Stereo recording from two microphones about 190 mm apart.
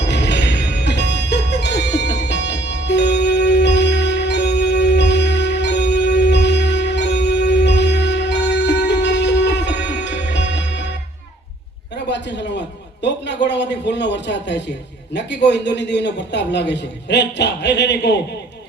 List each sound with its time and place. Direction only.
0.0 s music: 65° left (ahead or behind)
12.0 s a sound: 65° left (ahead or behind)
15.1 s a man's voice: 65° left (ahead or behind)